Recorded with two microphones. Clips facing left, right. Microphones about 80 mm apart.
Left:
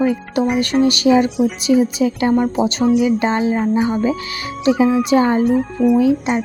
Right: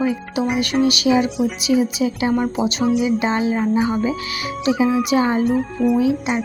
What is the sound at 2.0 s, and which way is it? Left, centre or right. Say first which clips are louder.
Speech: left 3 dB; left.